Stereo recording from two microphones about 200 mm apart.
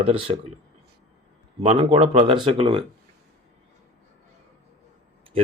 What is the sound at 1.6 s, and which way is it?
Speech, 30° right (ahead or behind).